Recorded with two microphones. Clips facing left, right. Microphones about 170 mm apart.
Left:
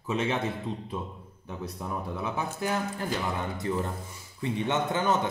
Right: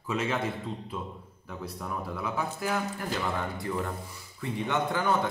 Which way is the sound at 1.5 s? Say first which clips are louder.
Left 1 dB; 20° left (ahead or behind).